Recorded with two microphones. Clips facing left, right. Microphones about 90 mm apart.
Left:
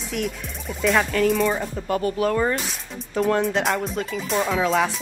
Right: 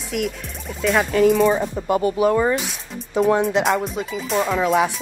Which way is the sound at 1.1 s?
15° right (ahead or behind).